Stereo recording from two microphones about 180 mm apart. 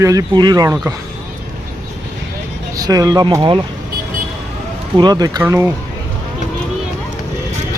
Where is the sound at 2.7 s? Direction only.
20° right (ahead or behind).